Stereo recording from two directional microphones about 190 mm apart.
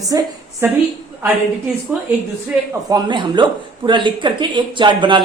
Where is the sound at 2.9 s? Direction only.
25° right (ahead or behind).